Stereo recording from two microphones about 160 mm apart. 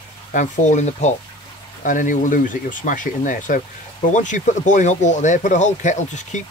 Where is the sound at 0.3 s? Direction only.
50° left (ahead or behind).